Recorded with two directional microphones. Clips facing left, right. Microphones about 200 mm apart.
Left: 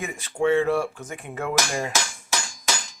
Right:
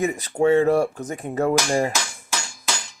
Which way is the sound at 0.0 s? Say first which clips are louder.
Right 5 dB; 40° right (ahead or behind).